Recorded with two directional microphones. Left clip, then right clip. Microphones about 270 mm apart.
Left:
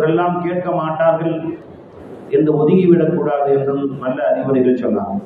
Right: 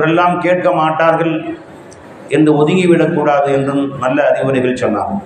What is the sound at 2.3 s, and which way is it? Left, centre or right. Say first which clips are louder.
A man's voice: right 2 dB; right.